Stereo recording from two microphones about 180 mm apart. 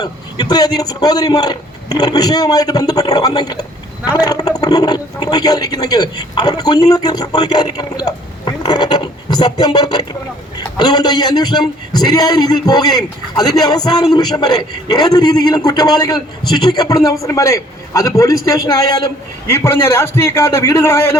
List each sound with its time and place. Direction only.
0.0 s a man's voice: 20° left (ahead or behind)
19.5 s a man's voice: 10° left (ahead or behind)